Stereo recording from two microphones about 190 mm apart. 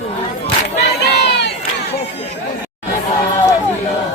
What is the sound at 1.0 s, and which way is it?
Crowd, 60° left (ahead or behind).